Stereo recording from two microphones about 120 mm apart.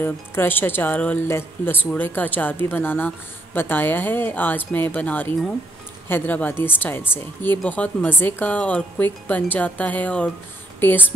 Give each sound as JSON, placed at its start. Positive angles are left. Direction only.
{"t": 0.0, "sound": "speech", "side_deg": 20}